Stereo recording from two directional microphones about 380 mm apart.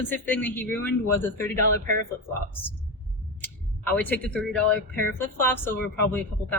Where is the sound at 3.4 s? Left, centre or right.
Centre.